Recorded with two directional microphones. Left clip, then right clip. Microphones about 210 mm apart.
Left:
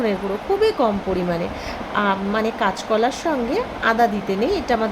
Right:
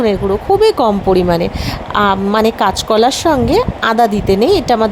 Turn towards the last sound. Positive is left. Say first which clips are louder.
# right 9 dB
turn(degrees=-40)  # may be behind; listen again after turning